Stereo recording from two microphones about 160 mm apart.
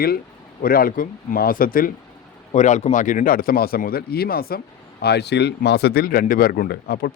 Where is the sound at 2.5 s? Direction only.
45° left (ahead or behind).